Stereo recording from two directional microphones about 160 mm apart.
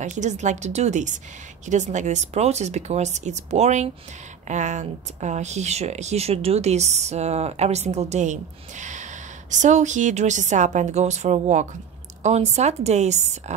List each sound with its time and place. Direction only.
0.0 s speech: 50° right (ahead or behind)